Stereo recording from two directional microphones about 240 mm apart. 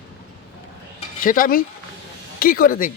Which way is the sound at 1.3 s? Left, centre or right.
Left.